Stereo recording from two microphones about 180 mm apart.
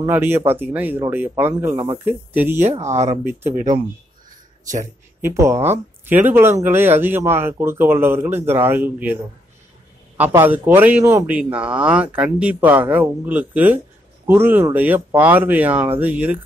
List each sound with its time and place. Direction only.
0.0 s a man's voice: 10° right (ahead or behind)
2.9 s speech: 40° right (ahead or behind)
4.8 s a man's voice: 15° right (ahead or behind)